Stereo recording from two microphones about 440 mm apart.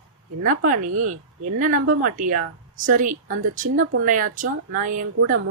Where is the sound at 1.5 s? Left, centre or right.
Centre.